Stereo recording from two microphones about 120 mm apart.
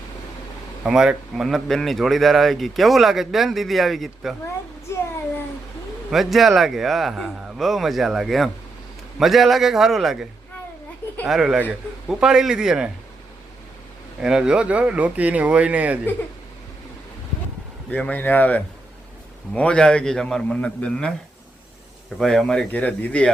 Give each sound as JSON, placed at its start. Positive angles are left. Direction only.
{"t": 0.9, "sound": "a man's voice", "side_deg": -5}
{"t": 4.9, "sound": "a child's voice", "side_deg": 20}
{"t": 6.1, "sound": "a man's voice", "side_deg": 0}
{"t": 11.3, "sound": "a man's voice", "side_deg": -5}
{"t": 14.2, "sound": "speech", "side_deg": -5}
{"t": 17.9, "sound": "a man's voice", "side_deg": 15}
{"t": 22.2, "sound": "a man's voice", "side_deg": 5}